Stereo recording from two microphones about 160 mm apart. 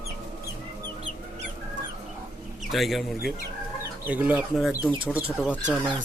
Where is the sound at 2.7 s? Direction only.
Centre (ahead or behind).